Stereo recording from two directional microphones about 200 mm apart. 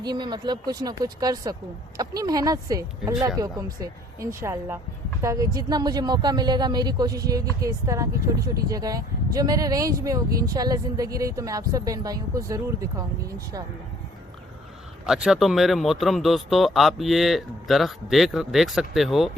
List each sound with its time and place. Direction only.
0.0 s speech: 20° right (ahead or behind)
15.0 s speech: centre (ahead or behind)